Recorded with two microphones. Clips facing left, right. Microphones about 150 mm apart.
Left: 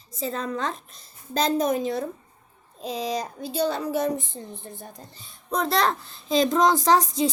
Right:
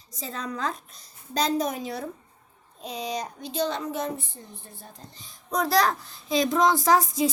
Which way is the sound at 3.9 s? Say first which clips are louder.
Left 5 dB; 20° left (ahead or behind).